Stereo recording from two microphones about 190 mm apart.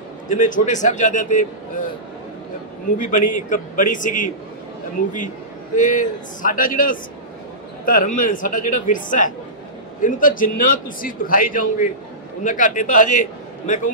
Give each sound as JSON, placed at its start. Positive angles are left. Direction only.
{"t": 0.3, "sound": "a man's voice", "side_deg": 40}
{"t": 3.0, "sound": "a man's voice", "side_deg": 45}
{"t": 5.8, "sound": "a man's voice", "side_deg": 45}